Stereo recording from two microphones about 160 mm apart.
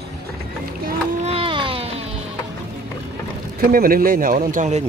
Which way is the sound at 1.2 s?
35° right (ahead or behind).